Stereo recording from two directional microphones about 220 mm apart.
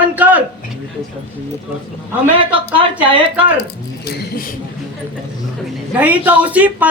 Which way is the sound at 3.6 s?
45° left (ahead or behind).